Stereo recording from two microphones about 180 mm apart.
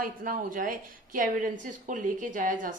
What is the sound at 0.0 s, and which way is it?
A woman's voice, 50° right (ahead or behind).